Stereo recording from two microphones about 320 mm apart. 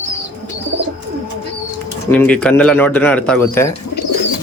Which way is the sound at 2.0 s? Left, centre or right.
Centre.